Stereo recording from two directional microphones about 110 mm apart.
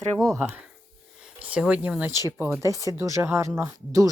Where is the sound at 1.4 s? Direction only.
10° right (ahead or behind).